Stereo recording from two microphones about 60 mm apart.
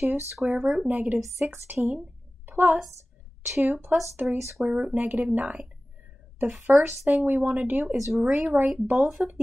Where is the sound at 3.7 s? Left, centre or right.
Right.